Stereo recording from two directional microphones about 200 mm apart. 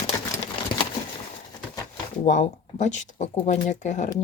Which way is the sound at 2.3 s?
35° left (ahead or behind).